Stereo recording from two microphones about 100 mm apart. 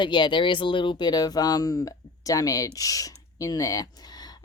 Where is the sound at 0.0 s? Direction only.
50° left (ahead or behind).